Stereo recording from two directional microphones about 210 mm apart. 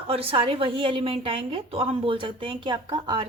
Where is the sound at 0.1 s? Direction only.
25° right (ahead or behind).